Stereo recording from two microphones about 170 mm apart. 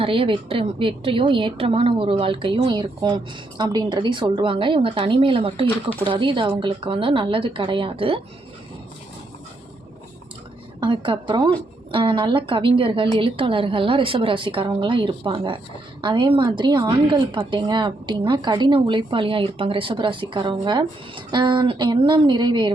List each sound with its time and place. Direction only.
0.0 s a woman's voice: 30° right (ahead or behind)
5.6 s speech: 10° left (ahead or behind)
6.1 s a woman's voice: 30° right (ahead or behind)
10.8 s a woman's voice: 30° right (ahead or behind)